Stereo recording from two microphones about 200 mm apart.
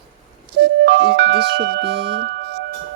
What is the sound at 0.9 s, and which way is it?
Speech, 55° right (ahead or behind).